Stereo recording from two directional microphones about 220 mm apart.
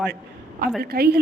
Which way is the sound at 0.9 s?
45° right (ahead or behind).